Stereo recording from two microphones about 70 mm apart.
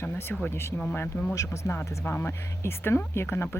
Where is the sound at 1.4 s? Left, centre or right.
Left.